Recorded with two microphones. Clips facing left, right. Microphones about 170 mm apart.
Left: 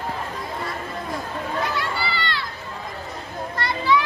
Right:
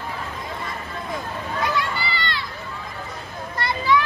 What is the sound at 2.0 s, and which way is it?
Children playing, 15° right (ahead or behind).